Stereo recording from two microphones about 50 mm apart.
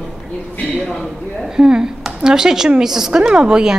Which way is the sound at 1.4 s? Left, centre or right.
Centre.